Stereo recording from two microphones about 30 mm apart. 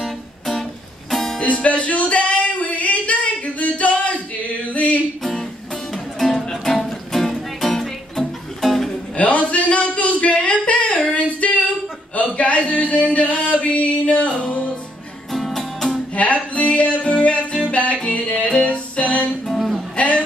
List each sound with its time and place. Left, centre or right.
0.0 s music: centre
1.4 s music: left
6.1 s music: centre
9.1 s a sound: left
11.1 s female singing: left
12.2 s a sound: left
15.3 s music: centre
16.5 s music: left
18.2 s music: left
18.6 s music: left
19.4 s music: centre
20.0 s music: left